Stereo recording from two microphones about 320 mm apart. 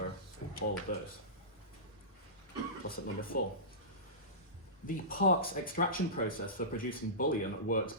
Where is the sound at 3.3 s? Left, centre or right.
Left.